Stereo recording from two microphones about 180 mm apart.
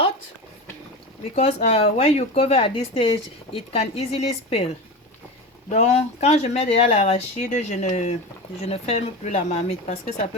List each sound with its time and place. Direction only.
1.4 s speech: 35° left (ahead or behind)